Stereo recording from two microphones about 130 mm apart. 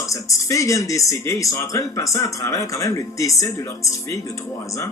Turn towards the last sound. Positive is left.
turn(degrees=25)  # may be behind; listen again after turning